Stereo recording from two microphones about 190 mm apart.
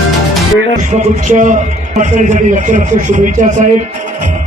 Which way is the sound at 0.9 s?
40° right (ahead or behind).